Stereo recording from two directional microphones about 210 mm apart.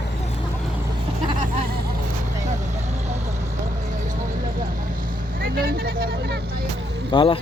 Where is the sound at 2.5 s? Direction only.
35° right (ahead or behind); by 7.1 s 50° right (ahead or behind).